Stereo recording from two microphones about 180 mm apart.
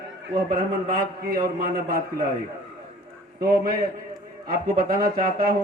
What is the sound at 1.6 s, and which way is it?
Speech, 55° right (ahead or behind).